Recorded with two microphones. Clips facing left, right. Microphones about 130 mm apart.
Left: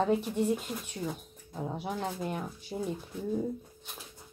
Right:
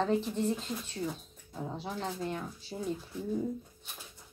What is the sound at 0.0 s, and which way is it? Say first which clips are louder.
Speech: left 2 dB; 15° left (ahead or behind).